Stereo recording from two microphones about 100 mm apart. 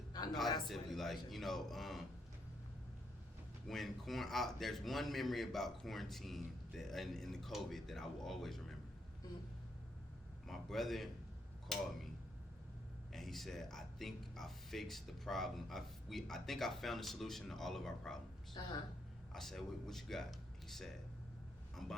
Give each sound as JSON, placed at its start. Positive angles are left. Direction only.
{"t": 0.7, "sound": "a man's voice", "side_deg": 5}
{"t": 3.7, "sound": "a man's voice", "side_deg": 0}
{"t": 10.4, "sound": "a man's voice", "side_deg": 0}
{"t": 13.1, "sound": "a man's voice", "side_deg": 0}
{"t": 18.6, "sound": "a woman's voice", "side_deg": 45}
{"t": 19.3, "sound": "a man's voice", "side_deg": 5}